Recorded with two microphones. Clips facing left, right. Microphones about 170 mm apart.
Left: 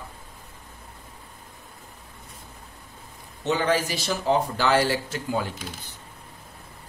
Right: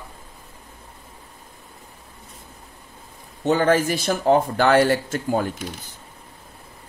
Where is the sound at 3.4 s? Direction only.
50° right (ahead or behind).